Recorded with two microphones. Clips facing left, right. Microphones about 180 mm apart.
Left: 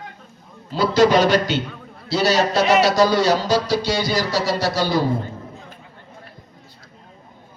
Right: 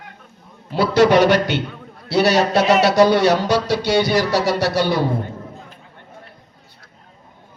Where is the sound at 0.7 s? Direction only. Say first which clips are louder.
Right 1 dB; 65° right (ahead or behind).